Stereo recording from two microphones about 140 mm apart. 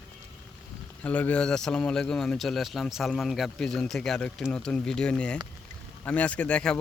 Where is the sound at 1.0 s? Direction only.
10° left (ahead or behind).